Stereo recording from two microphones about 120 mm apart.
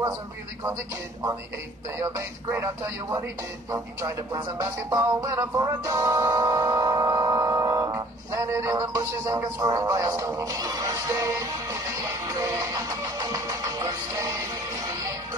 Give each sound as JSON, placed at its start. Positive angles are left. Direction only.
{"t": 2.0, "sound": "speech", "side_deg": -25}
{"t": 5.6, "sound": "music", "side_deg": -30}
{"t": 12.4, "sound": "music", "side_deg": -30}